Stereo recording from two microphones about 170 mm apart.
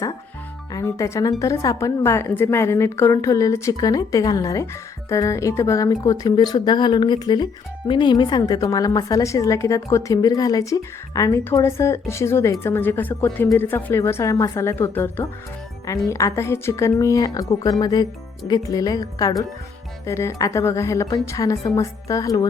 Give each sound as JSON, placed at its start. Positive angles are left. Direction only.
{"t": 0.7, "sound": "speech", "side_deg": 15}